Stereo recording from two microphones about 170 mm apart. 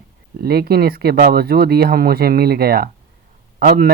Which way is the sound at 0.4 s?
65° right (ahead or behind).